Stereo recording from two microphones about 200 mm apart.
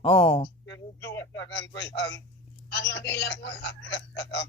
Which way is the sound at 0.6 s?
60° left (ahead or behind).